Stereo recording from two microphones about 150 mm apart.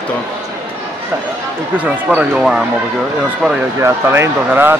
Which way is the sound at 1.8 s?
10° right (ahead or behind).